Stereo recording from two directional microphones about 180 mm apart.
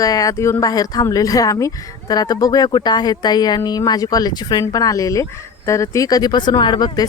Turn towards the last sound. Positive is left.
turn(degrees=20)  # may be behind; listen again after turning